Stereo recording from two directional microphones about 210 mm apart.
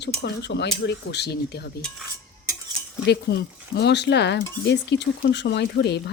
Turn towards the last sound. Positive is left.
turn(degrees=50)  # may be behind; listen again after turning